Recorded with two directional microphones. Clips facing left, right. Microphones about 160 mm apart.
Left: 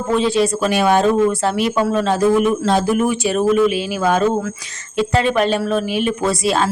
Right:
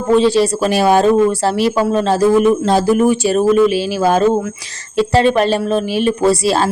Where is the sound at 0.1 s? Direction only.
35° right (ahead or behind).